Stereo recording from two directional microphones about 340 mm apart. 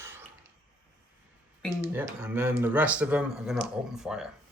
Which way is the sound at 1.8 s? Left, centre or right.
Centre.